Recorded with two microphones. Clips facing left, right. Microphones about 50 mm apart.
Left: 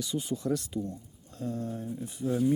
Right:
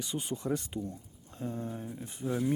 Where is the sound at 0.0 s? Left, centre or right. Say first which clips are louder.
Left 3 dB; right.